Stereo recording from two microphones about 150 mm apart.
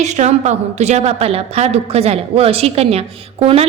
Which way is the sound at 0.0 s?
50° right (ahead or behind).